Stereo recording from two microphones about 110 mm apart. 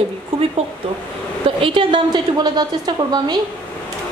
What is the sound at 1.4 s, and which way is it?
A woman's voice, 50° right (ahead or behind).